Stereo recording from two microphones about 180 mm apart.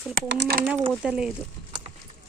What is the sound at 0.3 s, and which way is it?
Speech, 65° right (ahead or behind).